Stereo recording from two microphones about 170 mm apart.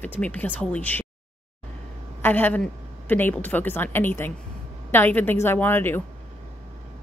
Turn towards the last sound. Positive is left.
turn(degrees=10)  # may be behind; listen again after turning